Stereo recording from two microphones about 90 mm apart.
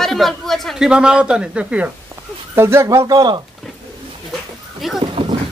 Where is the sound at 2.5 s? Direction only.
30° right (ahead or behind).